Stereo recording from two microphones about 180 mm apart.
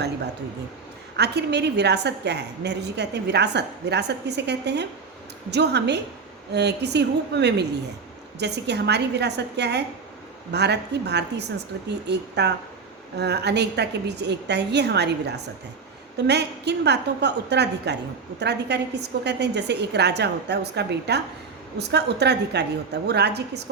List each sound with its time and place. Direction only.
1.1 s a woman's voice: 70° right (ahead or behind)